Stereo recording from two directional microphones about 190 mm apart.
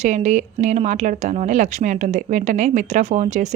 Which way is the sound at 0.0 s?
40° right (ahead or behind).